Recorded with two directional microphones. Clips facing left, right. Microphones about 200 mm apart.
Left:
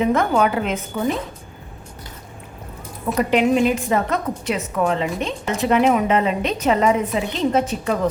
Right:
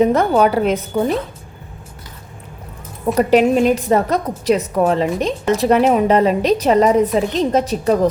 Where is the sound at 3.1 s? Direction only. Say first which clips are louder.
Right 4 dB; 40° right (ahead or behind).